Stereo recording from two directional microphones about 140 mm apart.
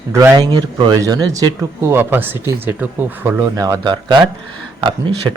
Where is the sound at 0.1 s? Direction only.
20° right (ahead or behind).